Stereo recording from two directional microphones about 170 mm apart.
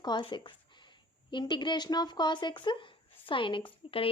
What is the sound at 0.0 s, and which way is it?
Speech, 25° left (ahead or behind).